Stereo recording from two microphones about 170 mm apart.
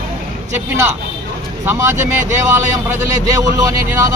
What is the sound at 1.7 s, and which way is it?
Speech, 20° right (ahead or behind).